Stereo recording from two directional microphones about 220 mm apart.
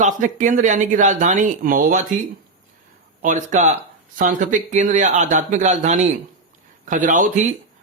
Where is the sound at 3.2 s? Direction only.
35° right (ahead or behind).